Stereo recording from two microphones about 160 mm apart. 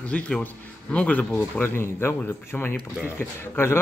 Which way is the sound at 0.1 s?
10° left (ahead or behind).